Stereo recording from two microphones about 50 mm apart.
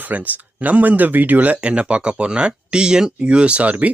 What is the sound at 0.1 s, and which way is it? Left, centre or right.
Speech, right.